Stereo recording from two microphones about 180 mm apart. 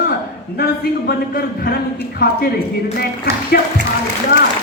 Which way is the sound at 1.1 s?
55° left (ahead or behind).